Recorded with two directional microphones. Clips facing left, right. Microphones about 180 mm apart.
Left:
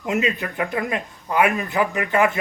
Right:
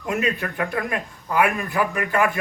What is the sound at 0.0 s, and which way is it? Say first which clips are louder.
A man's voice: left 1 dB; 20° left (ahead or behind).